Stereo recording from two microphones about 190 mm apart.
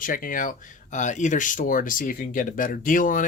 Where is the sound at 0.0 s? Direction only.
45° left (ahead or behind).